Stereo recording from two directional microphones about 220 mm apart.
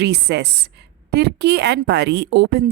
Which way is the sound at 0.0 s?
50° right (ahead or behind).